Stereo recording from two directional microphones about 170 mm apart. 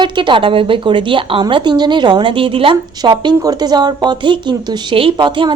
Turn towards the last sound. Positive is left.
turn(degrees=-30)  # may be behind; listen again after turning